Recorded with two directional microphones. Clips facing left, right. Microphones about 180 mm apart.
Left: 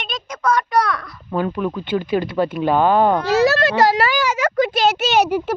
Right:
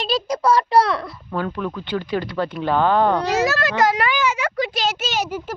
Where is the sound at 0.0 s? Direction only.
35° right (ahead or behind).